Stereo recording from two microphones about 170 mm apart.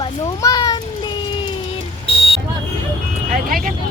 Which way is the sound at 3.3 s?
55° right (ahead or behind).